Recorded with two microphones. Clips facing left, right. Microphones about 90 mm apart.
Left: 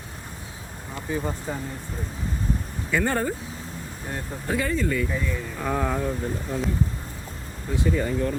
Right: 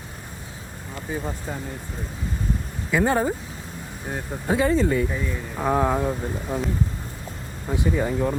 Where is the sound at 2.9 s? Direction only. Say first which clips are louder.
Right 3 dB; 10° right (ahead or behind).